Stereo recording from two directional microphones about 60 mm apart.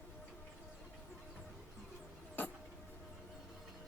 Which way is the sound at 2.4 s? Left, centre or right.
Left.